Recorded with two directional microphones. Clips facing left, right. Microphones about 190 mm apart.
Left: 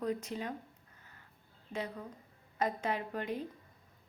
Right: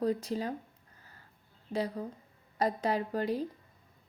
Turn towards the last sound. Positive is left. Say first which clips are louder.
# right 6 dB
turn(degrees=-35)  # may be behind; listen again after turning